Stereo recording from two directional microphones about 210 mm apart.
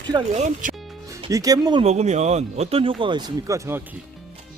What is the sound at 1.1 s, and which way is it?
Speech, 15° right (ahead or behind).